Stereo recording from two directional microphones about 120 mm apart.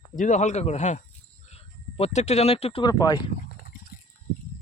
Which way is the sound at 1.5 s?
60° left (ahead or behind).